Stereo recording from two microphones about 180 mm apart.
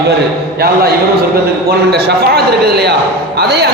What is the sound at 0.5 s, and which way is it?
A man's voice, 60° right (ahead or behind).